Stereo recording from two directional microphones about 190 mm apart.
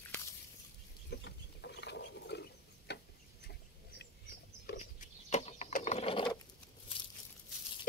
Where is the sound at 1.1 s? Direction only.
65° left (ahead or behind).